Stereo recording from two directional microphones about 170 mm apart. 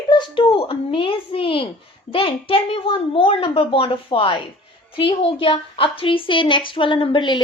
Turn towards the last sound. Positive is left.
turn(degrees=30)  # may be behind; listen again after turning